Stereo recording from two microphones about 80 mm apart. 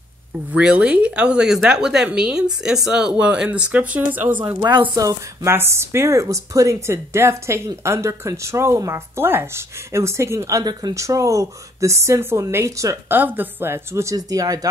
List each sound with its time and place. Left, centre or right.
0.5 s speech: centre
4.9 s speech: right
5.5 s speech: right
10.6 s speech: right
11.0 s speech: right
13.1 s speech: right
14.1 s speech: right